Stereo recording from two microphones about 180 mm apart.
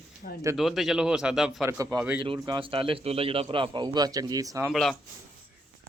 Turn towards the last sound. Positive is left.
turn(degrees=0)  # may be behind; listen again after turning